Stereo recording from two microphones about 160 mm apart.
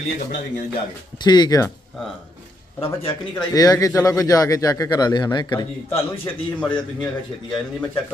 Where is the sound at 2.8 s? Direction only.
35° left (ahead or behind).